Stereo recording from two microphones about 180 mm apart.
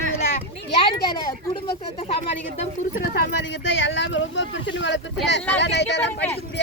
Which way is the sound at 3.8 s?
90° left.